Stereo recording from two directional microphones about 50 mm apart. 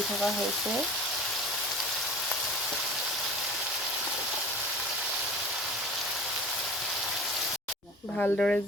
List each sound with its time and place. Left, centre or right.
8.2 s speech: centre